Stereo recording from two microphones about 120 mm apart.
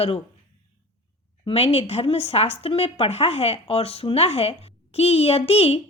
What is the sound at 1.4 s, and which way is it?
Speech, 55° left (ahead or behind).